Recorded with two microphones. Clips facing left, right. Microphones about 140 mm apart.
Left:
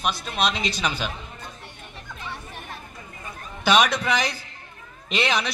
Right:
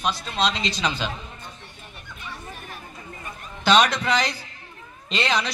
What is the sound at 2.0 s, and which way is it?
Chatter, 90° left.